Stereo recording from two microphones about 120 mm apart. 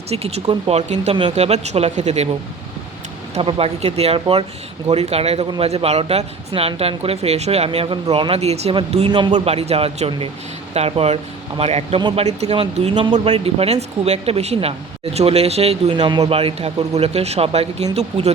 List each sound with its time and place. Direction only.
0.1 s speech: 60° right (ahead or behind)
3.4 s speech: 55° right (ahead or behind)
9.0 s a man's voice: 40° right (ahead or behind)
9.4 s speech: 60° right (ahead or behind)
16.0 s speech: 35° right (ahead or behind)
16.3 s speech: 55° right (ahead or behind)